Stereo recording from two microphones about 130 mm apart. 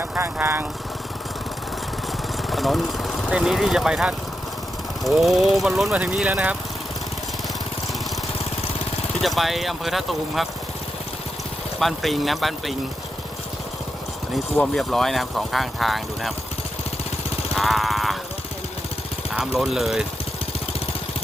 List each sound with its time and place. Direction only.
0.0 s speech: 15° right (ahead or behind)
2.5 s speech: centre (ahead or behind)
9.2 s speech: centre (ahead or behind)
11.8 s speech: centre (ahead or behind)
14.5 s speech: centre (ahead or behind)
17.5 s vehicle: centre (ahead or behind)
19.3 s speech: 5° right (ahead or behind)